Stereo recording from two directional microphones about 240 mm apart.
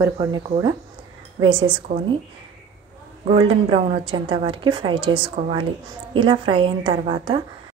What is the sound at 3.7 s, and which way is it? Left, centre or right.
A woman's voice, right.